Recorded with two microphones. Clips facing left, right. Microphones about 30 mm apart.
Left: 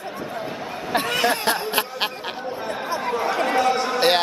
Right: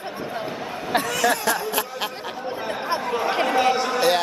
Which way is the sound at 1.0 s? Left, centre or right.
Left.